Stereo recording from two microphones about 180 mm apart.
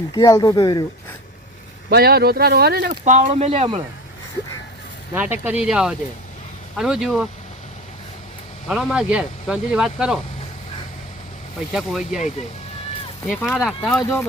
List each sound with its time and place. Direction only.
0.1 s speech: 20° left (ahead or behind)
1.9 s speech: 60° right (ahead or behind)
3.0 s speech: 40° right (ahead or behind)
5.1 s speech: 10° right (ahead or behind)
8.6 s speech: centre (ahead or behind)
11.7 s speech: centre (ahead or behind)
13.3 s speech: 5° left (ahead or behind)